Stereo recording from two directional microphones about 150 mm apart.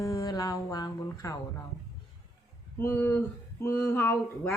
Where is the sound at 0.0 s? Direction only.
20° left (ahead or behind).